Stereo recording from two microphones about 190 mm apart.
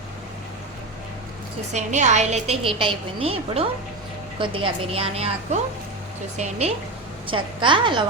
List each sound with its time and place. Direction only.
1.7 s a woman's voice: 40° right (ahead or behind)